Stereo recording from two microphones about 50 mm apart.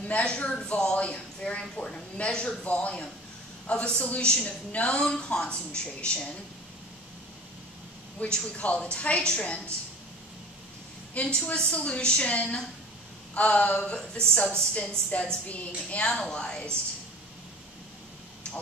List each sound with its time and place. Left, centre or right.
0.0 s a woman's voice: left
8.2 s a woman's voice: left
11.1 s a woman's voice: left
16.1 s a woman's voice: centre